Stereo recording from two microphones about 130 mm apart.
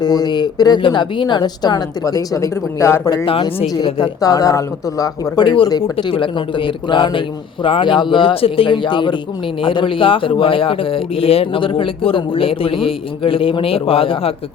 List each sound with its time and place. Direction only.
0.0 s a man's voice: 30° left (ahead or behind)
3.2 s a man's voice: 45° left (ahead or behind)
3.8 s a woman's voice: 35° left (ahead or behind)